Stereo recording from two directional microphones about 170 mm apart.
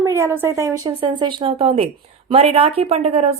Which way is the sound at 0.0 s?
15° right (ahead or behind).